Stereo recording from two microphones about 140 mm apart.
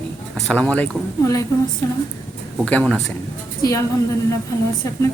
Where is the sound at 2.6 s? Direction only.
10° left (ahead or behind).